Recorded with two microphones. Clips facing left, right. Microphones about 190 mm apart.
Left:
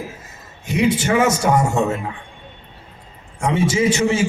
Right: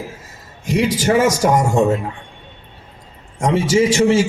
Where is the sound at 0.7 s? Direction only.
40° right (ahead or behind).